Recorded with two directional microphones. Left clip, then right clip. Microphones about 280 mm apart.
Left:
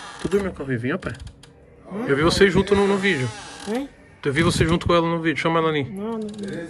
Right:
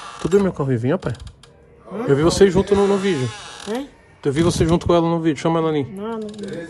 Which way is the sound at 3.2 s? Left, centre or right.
Centre.